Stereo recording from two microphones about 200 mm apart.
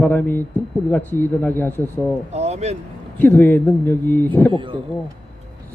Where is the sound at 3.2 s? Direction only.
10° left (ahead or behind).